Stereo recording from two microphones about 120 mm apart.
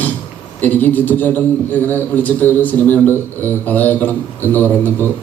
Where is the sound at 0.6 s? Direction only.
15° left (ahead or behind).